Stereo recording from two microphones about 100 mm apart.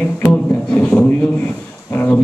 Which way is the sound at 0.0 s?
10° left (ahead or behind).